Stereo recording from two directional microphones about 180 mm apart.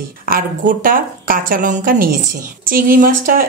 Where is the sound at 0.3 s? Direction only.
50° right (ahead or behind).